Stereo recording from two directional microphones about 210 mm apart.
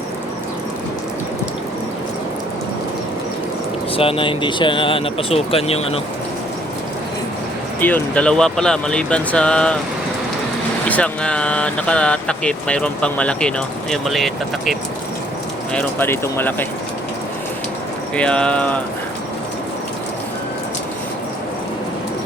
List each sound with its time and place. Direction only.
3.9 s speech: 25° left (ahead or behind)
7.8 s speech: 10° left (ahead or behind)
10.8 s speech: 5° left (ahead or behind)
18.2 s speech: 5° left (ahead or behind)